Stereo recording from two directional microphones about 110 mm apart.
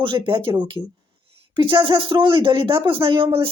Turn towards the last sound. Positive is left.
turn(degrees=-50)  # may be behind; listen again after turning